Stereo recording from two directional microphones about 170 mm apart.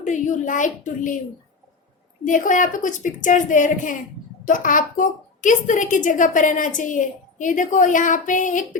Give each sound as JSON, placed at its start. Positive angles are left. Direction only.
{"t": 0.0, "sound": "a woman's voice", "side_deg": 45}
{"t": 2.2, "sound": "a woman's voice", "side_deg": 50}